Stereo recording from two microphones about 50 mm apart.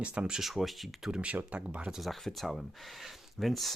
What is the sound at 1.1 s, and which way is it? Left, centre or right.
Speech, right.